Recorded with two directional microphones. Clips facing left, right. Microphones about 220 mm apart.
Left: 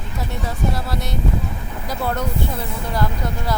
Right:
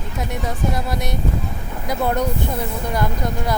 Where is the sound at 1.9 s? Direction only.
20° right (ahead or behind).